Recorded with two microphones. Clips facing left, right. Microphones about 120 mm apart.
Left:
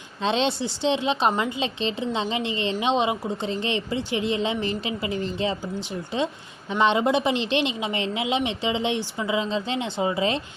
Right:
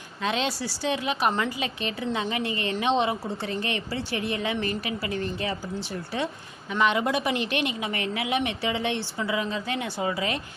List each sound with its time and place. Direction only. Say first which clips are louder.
0.2 s a woman's voice: left 4 dB; 30° left (ahead or behind)